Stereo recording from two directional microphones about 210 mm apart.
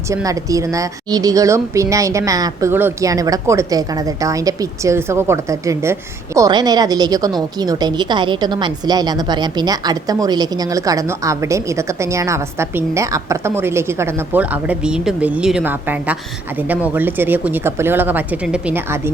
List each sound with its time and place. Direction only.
0.1 s a woman's voice: 15° right (ahead or behind)